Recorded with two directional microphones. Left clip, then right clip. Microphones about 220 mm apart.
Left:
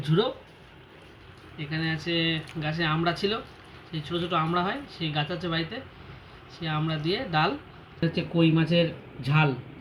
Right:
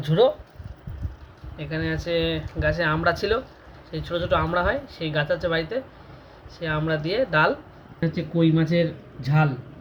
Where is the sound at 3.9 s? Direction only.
45° right (ahead or behind).